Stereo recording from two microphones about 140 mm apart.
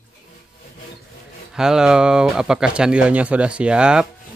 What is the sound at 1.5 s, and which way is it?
Speech, 5° right (ahead or behind).